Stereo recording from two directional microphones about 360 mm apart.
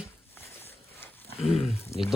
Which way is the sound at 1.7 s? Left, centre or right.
Centre.